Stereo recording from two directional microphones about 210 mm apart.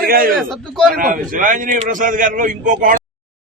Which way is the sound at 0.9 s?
40° right (ahead or behind).